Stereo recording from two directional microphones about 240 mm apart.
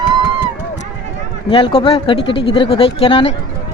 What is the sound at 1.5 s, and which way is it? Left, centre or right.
Speech, left.